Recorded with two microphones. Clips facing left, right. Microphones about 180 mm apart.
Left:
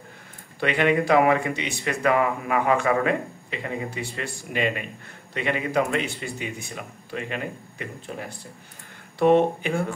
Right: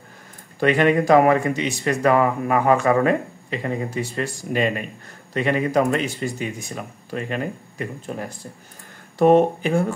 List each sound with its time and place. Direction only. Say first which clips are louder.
0.6 s speech: right 4 dB; 40° right (ahead or behind)